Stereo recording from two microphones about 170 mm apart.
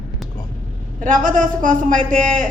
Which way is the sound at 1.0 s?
50° right (ahead or behind).